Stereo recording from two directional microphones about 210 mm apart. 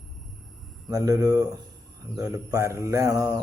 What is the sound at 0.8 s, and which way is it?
Speech, 15° right (ahead or behind).